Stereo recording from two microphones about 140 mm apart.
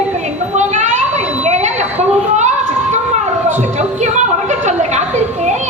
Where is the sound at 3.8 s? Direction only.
55° right (ahead or behind).